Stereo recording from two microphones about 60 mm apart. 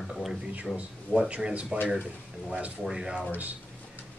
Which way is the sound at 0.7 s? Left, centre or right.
Centre.